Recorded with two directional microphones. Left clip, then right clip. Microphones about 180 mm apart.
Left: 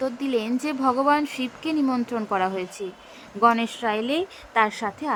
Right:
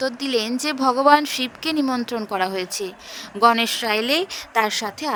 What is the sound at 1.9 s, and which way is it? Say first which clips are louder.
Speech: right 1 dB; 40° right (ahead or behind).